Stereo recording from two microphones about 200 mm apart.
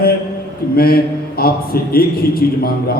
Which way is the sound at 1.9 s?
50° left (ahead or behind).